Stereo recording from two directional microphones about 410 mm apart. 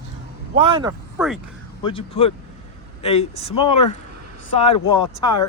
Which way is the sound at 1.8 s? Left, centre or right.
Centre.